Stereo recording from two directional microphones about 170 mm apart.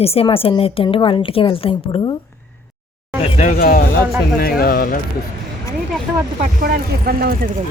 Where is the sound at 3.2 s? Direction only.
45° left (ahead or behind).